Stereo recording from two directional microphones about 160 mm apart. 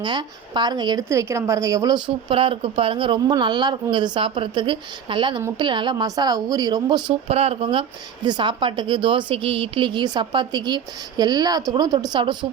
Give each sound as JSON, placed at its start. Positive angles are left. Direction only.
{"t": 0.0, "sound": "a woman's voice", "side_deg": -25}
{"t": 2.3, "sound": "a woman's voice", "side_deg": -35}